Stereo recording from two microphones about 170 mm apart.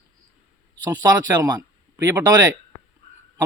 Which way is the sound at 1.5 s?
20° right (ahead or behind).